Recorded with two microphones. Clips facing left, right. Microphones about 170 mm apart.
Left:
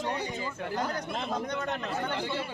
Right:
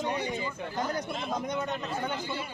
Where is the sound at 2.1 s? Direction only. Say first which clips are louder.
Left 2 dB; 75° left (ahead or behind).